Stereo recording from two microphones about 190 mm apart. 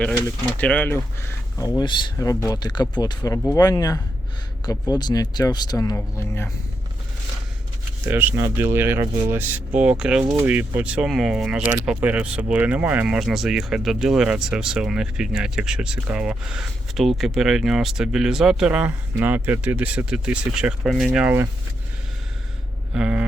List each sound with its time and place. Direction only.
0.0 s speech: 10° left (ahead or behind)
1.5 s speech: 20° left (ahead or behind)
8.0 s speech: 10° right (ahead or behind)
23.0 s speech: 5° right (ahead or behind)